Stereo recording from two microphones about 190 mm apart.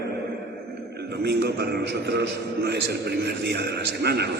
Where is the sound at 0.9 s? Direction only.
60° right (ahead or behind).